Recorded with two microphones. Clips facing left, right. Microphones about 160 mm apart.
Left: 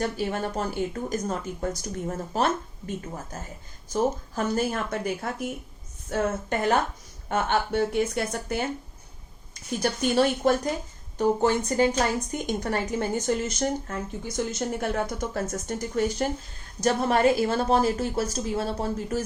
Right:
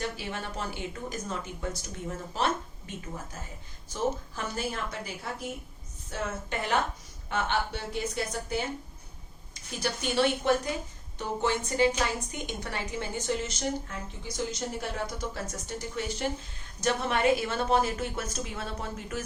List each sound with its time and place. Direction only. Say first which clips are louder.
0.0 s speech: left 7 dB; 45° left (ahead or behind)
3.9 s speech: left 5 dB; 45° left (ahead or behind)
9.8 s a woman's voice: left 4 dB; 45° left (ahead or behind)